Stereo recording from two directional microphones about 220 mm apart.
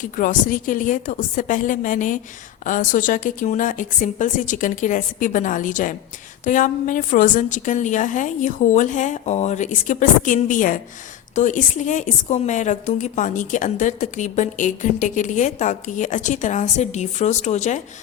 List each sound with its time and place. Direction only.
0.0 s a woman's voice: 35° left (ahead or behind)